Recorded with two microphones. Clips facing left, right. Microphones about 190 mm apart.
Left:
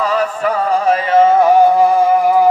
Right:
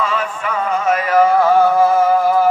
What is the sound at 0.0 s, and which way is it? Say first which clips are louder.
Music: left 5 dB; 40° left (ahead or behind).